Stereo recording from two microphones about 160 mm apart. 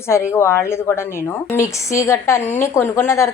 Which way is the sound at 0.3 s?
15° left (ahead or behind).